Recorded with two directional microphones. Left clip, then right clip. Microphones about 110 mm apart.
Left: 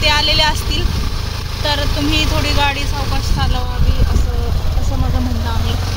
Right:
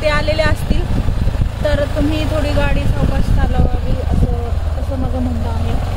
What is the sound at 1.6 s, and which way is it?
Speech, 80° right.